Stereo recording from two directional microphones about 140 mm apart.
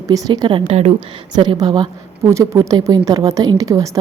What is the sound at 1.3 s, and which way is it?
A woman's voice, 30° right (ahead or behind).